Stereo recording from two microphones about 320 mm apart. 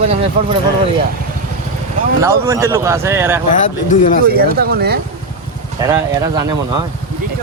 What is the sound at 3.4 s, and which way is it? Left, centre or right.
Speech, left.